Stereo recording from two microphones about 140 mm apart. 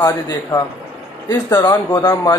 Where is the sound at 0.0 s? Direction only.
25° left (ahead or behind).